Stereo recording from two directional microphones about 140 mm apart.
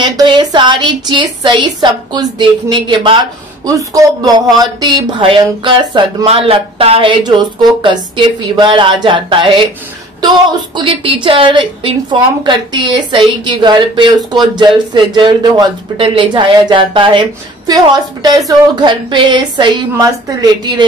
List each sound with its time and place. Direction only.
0.0 s speech: 30° right (ahead or behind)
10.8 s a woman's voice: 35° right (ahead or behind)